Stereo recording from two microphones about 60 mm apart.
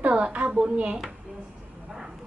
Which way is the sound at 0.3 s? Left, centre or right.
Right.